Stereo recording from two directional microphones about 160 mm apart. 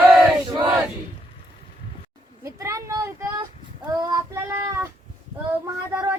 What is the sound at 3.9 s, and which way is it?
Child singing, 20° right (ahead or behind).